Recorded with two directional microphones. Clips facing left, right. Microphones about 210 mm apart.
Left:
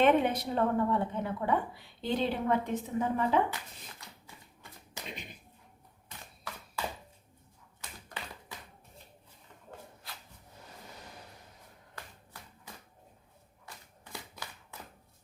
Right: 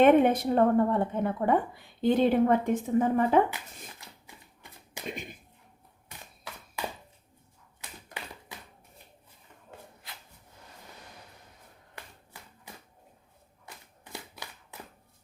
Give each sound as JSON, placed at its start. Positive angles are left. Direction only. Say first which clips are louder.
{"t": 0.0, "sound": "a woman's voice", "louder": "right 6 dB", "side_deg": -50}
{"t": 7.8, "sound": "typewriter", "louder": "right 1 dB", "side_deg": -10}
{"t": 14.0, "sound": "a sound", "louder": "right 2 dB", "side_deg": -20}